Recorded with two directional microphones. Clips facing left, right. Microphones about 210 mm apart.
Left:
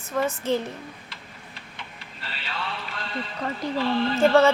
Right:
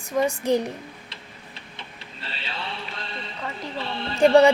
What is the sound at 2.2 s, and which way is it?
Music, 25° right (ahead or behind).